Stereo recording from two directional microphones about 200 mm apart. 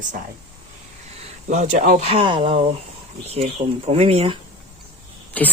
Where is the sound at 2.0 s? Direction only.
25° right (ahead or behind).